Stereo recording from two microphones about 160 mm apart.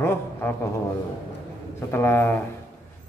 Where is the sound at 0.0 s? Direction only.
15° left (ahead or behind).